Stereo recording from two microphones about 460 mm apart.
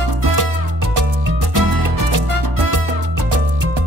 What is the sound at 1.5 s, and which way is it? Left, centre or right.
Music, right.